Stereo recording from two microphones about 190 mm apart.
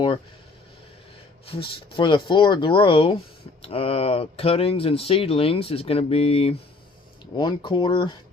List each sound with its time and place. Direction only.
1.5 s speech: 30° left (ahead or behind)